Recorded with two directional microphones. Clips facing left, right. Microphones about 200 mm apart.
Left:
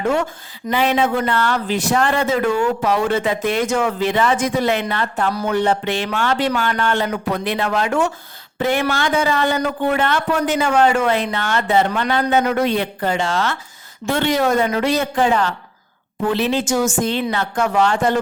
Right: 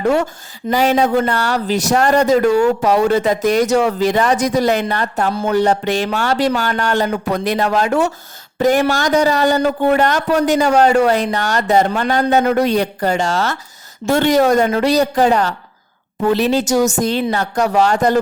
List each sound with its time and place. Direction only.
0.0 s a man's voice: 40° right (ahead or behind)